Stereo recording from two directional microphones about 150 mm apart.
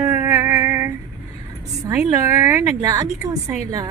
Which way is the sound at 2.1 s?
20° right (ahead or behind).